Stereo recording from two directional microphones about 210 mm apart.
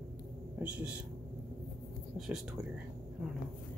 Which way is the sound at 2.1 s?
Centre (ahead or behind).